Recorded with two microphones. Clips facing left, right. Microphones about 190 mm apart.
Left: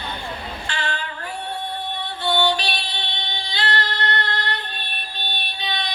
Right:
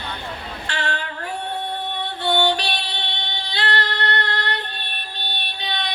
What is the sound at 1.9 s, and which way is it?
Music, 65° right (ahead or behind).